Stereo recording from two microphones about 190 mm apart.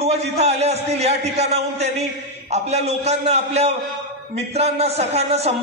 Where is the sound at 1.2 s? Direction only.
35° right (ahead or behind).